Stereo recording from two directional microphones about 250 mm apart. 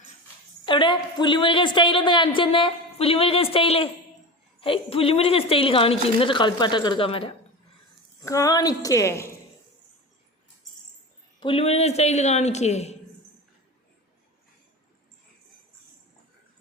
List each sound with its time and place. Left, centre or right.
0.6 s a woman's voice: centre
11.3 s a woman's voice: left